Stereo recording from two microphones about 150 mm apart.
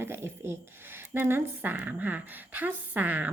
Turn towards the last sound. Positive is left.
turn(degrees=-10)  # may be behind; listen again after turning